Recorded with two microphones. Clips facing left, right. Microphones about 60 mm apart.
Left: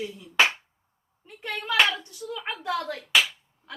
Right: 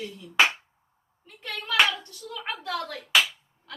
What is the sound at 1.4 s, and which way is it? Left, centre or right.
A woman's voice, left.